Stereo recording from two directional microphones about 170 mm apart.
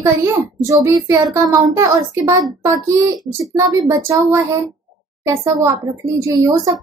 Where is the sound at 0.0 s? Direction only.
15° right (ahead or behind).